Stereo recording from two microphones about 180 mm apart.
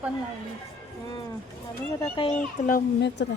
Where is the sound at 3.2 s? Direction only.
70° left (ahead or behind).